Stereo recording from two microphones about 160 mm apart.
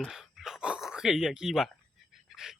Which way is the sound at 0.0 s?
Centre (ahead or behind).